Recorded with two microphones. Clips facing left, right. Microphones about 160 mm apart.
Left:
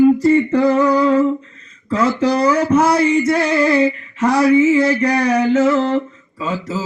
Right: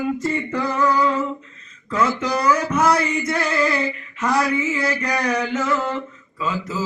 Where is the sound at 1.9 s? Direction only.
30° left (ahead or behind).